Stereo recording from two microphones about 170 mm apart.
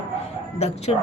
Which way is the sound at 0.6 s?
40° left (ahead or behind).